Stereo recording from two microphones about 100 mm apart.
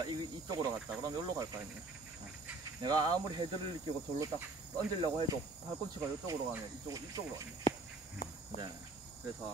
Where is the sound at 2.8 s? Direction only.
45° right (ahead or behind).